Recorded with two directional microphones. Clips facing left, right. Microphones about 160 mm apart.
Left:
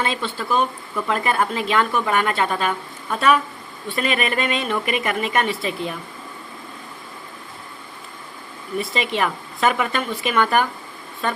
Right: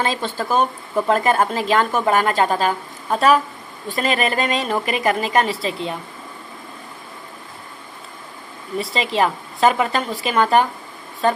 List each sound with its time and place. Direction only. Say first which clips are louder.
0.0 s speech: right 2 dB; 40° right (ahead or behind)
8.8 s speech: right 3 dB; 30° right (ahead or behind)